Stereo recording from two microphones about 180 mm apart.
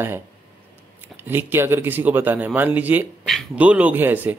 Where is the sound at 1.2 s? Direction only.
10° right (ahead or behind).